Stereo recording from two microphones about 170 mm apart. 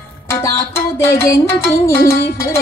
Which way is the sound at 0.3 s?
15° left (ahead or behind).